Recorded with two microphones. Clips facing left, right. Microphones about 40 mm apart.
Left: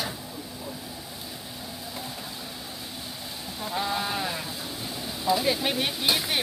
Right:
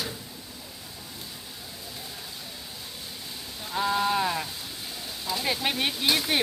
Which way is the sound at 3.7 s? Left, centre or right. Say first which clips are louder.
Right 4 dB; centre.